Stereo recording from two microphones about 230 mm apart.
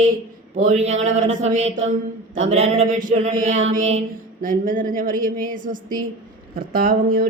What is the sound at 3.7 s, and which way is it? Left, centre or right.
Speech, right.